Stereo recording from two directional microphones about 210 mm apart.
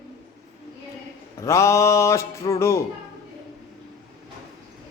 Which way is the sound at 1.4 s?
15° left (ahead or behind).